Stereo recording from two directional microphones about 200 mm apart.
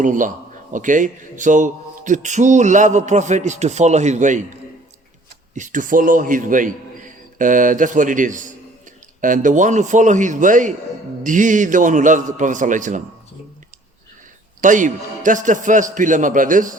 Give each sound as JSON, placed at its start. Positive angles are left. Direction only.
{"t": 0.0, "sound": "a man's voice", "side_deg": -40}
{"t": 5.5, "sound": "a man's voice", "side_deg": -40}
{"t": 14.6, "sound": "a man's voice", "side_deg": -40}